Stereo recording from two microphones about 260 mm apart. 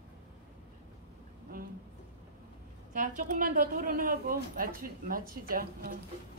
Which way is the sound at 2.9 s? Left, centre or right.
Right.